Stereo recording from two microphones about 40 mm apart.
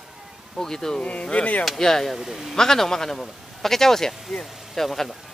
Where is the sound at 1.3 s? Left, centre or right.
Left.